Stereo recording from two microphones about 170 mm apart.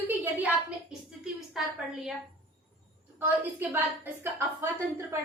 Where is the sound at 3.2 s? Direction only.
10° right (ahead or behind).